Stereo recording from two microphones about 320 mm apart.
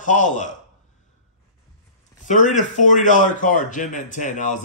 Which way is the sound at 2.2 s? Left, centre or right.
Left.